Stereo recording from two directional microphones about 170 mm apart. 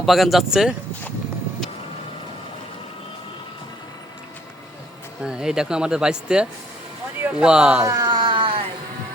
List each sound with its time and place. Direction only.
0.0 s speech: centre (ahead or behind)
5.2 s speech: 5° right (ahead or behind)
7.9 s a sound: 25° right (ahead or behind)